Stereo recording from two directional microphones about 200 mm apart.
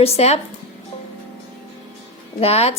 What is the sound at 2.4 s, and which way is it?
Speech, 30° left (ahead or behind).